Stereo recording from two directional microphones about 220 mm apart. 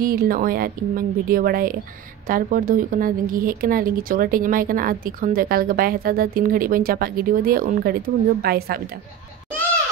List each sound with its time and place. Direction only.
0.0 s a woman's voice: 40° right (ahead or behind)